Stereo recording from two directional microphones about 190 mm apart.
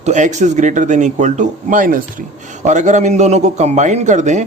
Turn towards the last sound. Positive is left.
turn(degrees=-40)  # may be behind; listen again after turning